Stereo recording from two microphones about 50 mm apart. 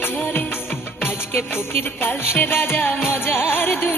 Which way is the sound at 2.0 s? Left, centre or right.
Left.